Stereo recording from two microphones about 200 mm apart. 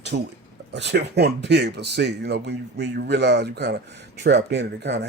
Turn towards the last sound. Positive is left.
turn(degrees=-60)  # may be behind; listen again after turning